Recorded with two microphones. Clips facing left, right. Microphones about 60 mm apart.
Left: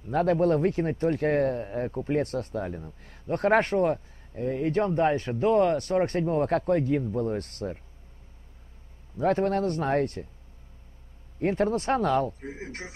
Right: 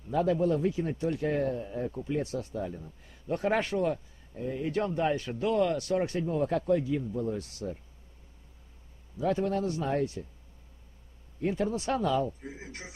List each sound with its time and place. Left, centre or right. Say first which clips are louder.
0.1 s speech: left 4 dB; left
9.1 s speech: left 4 dB; left
11.3 s speech: left 5 dB; left
12.4 s speech: left 5 dB; left